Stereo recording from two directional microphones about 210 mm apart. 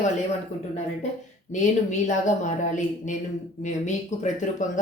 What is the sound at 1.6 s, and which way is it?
Speech, 35° left (ahead or behind).